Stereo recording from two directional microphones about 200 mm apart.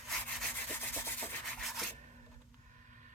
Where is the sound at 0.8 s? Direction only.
10° left (ahead or behind).